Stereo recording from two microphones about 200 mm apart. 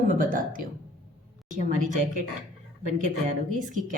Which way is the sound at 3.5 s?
40° right (ahead or behind).